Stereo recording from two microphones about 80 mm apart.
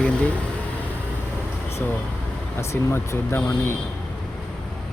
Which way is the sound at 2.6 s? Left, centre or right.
Left.